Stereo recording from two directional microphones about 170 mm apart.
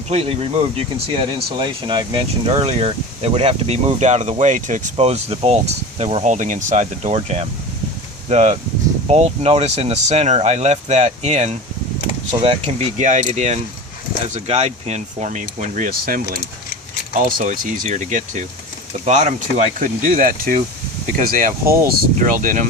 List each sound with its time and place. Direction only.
0.1 s speech: 35° right (ahead or behind)
2.5 s speech: 35° right (ahead or behind)